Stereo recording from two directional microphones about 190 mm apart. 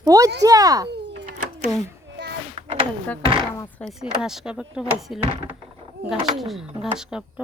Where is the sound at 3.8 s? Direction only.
5° right (ahead or behind).